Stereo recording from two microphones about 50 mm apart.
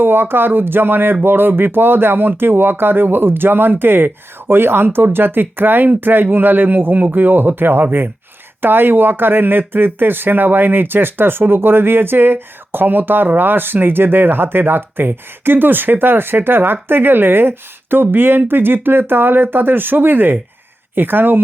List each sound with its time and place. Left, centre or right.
0.0 s speech: right